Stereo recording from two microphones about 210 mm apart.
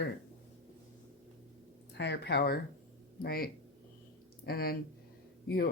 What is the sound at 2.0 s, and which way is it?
Speech, 55° left (ahead or behind).